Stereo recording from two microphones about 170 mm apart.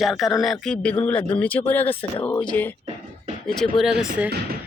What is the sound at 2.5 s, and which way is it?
Speech, 10° left (ahead or behind).